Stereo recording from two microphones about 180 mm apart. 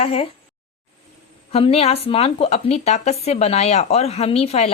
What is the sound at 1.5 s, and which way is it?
Speech, 35° left (ahead or behind).